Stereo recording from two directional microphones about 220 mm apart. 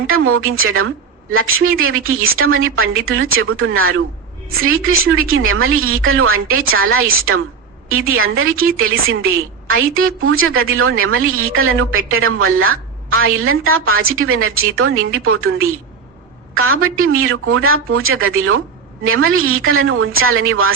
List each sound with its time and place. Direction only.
0.1 s a woman's voice: 70° right (ahead or behind)